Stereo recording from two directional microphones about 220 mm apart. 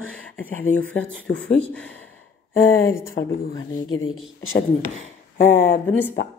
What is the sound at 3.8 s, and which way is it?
Speech, 65° left (ahead or behind).